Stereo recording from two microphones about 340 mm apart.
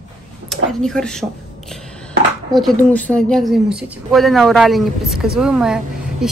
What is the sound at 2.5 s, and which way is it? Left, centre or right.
Speech, centre.